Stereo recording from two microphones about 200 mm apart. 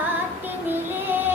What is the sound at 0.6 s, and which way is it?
Music, 10° right (ahead or behind).